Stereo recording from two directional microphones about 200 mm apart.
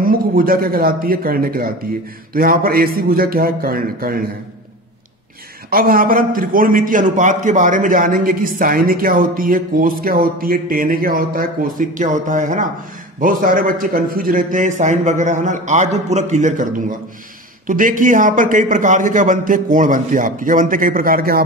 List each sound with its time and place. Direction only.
0.0 s a man's voice: 45° right (ahead or behind)
5.7 s a man's voice: 45° right (ahead or behind)
17.6 s a man's voice: 40° right (ahead or behind)